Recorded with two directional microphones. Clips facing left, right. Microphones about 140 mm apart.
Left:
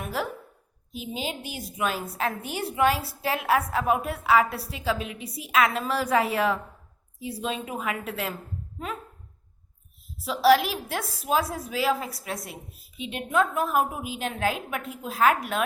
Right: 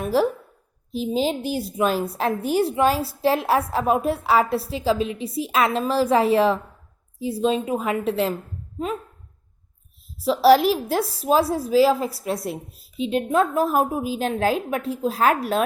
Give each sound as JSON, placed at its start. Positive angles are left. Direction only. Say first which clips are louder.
{"t": 0.0, "sound": "a sound", "louder": "right 10 dB", "side_deg": -35}
{"t": 0.9, "sound": "a woman's voice", "louder": "right 10 dB", "side_deg": -35}
{"t": 10.2, "sound": "a woman's voice", "louder": "right 5 dB", "side_deg": -40}